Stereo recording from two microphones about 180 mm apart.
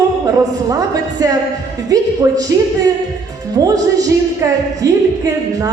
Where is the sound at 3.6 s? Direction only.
20° right (ahead or behind).